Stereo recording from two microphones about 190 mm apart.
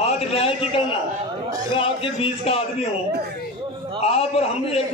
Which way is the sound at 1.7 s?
30° left (ahead or behind).